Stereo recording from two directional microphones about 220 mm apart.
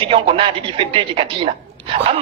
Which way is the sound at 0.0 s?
25° right (ahead or behind).